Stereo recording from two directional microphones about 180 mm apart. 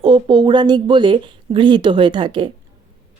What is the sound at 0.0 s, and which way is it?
Speech, 30° right (ahead or behind).